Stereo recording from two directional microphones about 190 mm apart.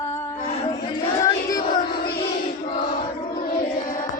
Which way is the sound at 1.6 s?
55° left (ahead or behind).